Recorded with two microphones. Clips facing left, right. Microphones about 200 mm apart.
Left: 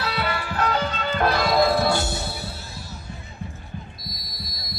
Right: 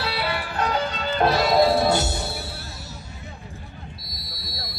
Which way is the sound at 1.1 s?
20° right (ahead or behind).